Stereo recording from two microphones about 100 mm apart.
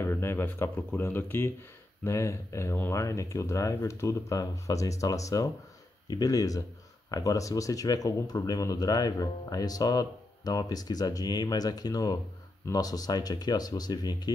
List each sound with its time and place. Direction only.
0.0 s speech: 25° left (ahead or behind); by 14.3 s 45° left (ahead or behind)